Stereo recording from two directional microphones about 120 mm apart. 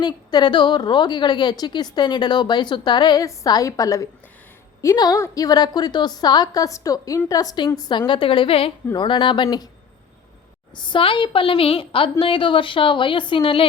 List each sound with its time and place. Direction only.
0.0 s a woman's voice: 35° left (ahead or behind)
10.8 s speech: 40° left (ahead or behind)